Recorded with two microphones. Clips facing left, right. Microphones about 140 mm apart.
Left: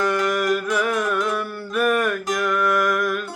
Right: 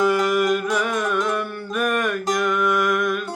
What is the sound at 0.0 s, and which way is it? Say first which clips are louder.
Music: right 3 dB; 5° right (ahead or behind).